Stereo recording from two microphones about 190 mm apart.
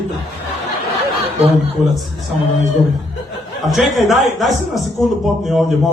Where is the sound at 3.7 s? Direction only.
Centre (ahead or behind).